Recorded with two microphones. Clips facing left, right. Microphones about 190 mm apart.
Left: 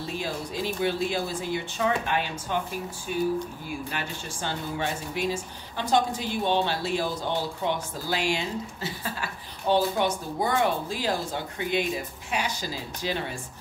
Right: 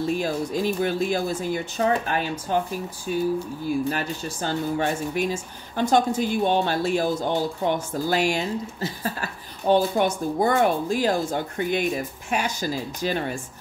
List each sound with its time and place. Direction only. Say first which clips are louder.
0.2 s speech: right 6 dB; 45° right (ahead or behind)